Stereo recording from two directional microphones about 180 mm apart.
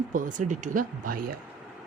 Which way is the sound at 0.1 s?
45° right (ahead or behind).